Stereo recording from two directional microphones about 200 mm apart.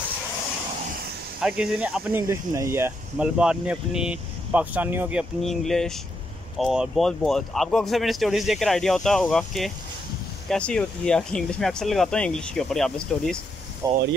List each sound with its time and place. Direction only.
1.4 s speech: 5° right (ahead or behind)
5.4 s speech: centre (ahead or behind)
13.8 s speech: 15° right (ahead or behind)